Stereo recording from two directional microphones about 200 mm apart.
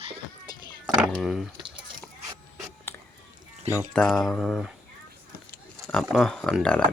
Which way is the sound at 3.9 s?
Centre (ahead or behind).